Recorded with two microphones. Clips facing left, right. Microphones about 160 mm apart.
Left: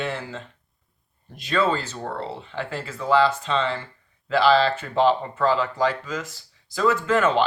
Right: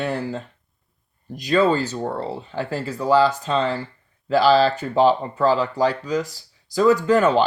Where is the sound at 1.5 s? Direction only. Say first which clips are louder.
Right 5 dB; 40° right (ahead or behind).